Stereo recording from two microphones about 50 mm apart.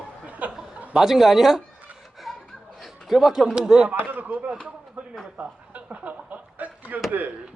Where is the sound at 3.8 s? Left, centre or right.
Right.